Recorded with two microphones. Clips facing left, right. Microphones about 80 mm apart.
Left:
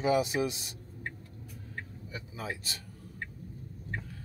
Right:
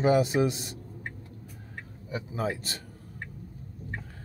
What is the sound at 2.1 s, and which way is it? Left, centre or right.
Speech, right.